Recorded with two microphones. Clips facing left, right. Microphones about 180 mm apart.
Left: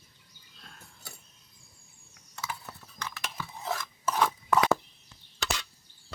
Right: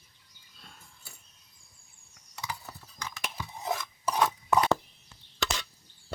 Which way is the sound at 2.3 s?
10° right (ahead or behind).